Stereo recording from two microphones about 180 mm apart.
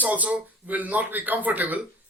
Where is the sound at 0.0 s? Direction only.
10° right (ahead or behind).